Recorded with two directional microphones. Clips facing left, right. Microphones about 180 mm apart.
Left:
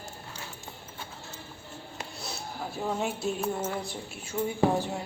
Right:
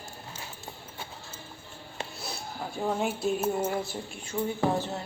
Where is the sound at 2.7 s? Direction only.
Centre (ahead or behind).